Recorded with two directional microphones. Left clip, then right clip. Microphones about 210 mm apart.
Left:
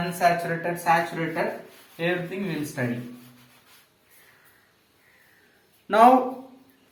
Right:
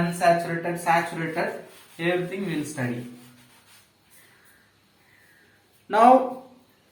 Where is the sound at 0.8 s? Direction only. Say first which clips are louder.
Even; 15° left (ahead or behind).